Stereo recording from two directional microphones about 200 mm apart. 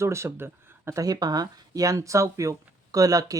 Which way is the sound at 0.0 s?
15° right (ahead or behind).